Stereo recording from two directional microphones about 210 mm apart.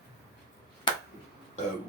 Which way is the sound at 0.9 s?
20° left (ahead or behind).